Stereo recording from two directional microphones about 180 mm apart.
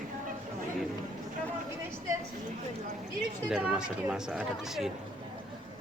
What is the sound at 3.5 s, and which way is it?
Speech, 5° right (ahead or behind).